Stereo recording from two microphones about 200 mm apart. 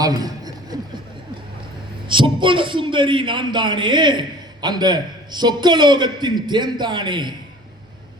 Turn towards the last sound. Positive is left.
turn(degrees=-20)  # may be behind; listen again after turning